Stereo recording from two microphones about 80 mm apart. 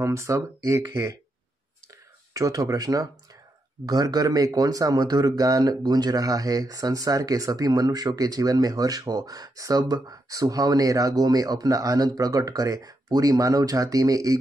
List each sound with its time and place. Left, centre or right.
0.0 s speech: right
2.3 s speech: right